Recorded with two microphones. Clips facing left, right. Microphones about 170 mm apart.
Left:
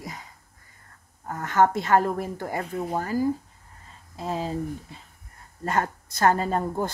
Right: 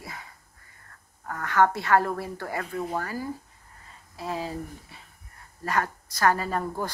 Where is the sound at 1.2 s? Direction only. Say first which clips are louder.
Left 1 dB; 20° left (ahead or behind).